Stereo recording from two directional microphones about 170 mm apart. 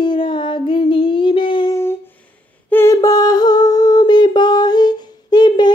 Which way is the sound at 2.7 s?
15° left (ahead or behind).